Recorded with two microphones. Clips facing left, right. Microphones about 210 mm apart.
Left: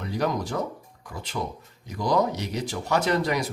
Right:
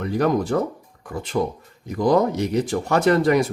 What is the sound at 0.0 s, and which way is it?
Speech, 55° right (ahead or behind).